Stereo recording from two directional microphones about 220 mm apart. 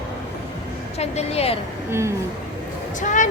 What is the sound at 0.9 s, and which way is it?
Speech, 30° left (ahead or behind).